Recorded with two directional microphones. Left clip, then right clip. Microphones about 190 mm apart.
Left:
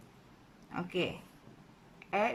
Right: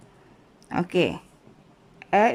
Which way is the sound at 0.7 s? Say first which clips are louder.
Right 12 dB; 40° right (ahead or behind).